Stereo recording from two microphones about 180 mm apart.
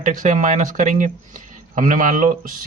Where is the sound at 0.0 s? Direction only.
45° right (ahead or behind).